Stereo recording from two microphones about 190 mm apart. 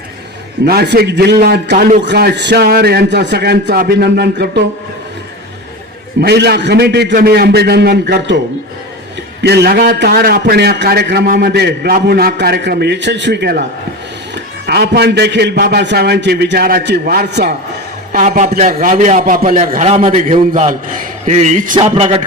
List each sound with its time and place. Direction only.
0.6 s a man's voice: 55° right (ahead or behind)
6.1 s a man's voice: 60° right (ahead or behind)
9.4 s a man's voice: 60° right (ahead or behind)
18.1 s a man's voice: 45° right (ahead or behind)
19.5 s a man's voice: 35° right (ahead or behind)
20.5 s a man's voice: 45° right (ahead or behind)